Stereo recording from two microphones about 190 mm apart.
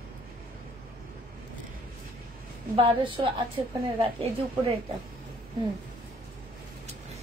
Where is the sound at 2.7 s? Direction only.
25° right (ahead or behind).